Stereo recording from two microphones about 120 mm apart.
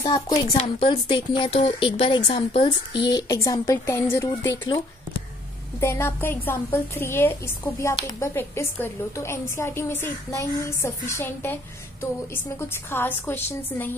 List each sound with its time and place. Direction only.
0.0 s a woman's voice: 35° left (ahead or behind)
0.6 s a woman's voice: 50° left (ahead or behind); by 4.6 s 20° left (ahead or behind)
5.8 s a woman's voice: 20° left (ahead or behind)
12.5 s a woman's voice: 20° left (ahead or behind)